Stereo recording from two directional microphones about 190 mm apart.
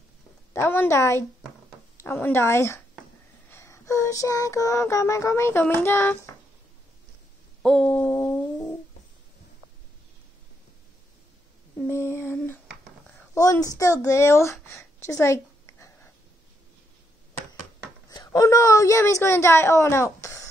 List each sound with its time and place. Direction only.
0.5 s a woman's voice: 10° left (ahead or behind)
3.4 s child singing: 15° left (ahead or behind)
7.6 s a sound: 5° left (ahead or behind)
11.8 s a sound: 15° left (ahead or behind)
13.3 s speech: 20° left (ahead or behind)
18.1 s a woman's voice: 20° left (ahead or behind)